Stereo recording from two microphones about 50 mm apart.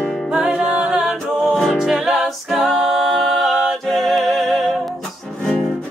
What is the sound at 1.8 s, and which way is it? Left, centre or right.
Music, centre.